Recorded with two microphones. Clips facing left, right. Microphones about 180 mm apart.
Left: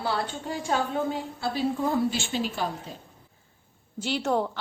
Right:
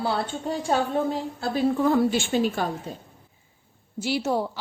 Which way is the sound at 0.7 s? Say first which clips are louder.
Right 3 dB; 35° right (ahead or behind).